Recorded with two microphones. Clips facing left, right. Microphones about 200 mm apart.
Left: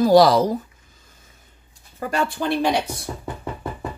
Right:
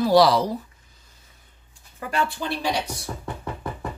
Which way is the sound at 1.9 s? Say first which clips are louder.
Left 3 dB; 40° left (ahead or behind).